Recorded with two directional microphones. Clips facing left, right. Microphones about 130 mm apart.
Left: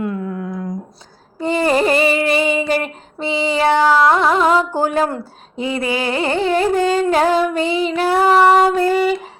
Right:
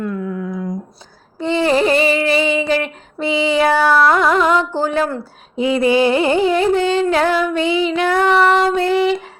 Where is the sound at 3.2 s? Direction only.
35° left (ahead or behind).